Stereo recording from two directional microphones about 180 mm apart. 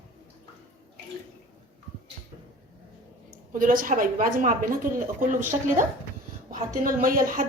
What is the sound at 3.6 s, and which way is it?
Speech, 50° right (ahead or behind).